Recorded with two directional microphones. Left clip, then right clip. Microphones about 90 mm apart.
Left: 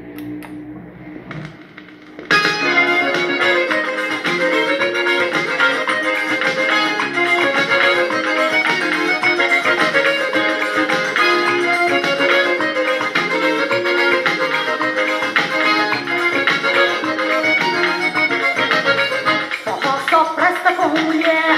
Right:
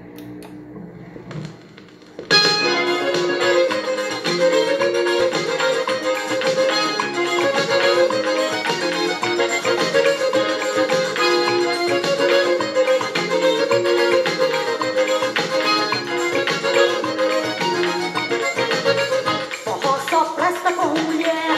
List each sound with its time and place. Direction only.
2.2 s music: 15° right (ahead or behind)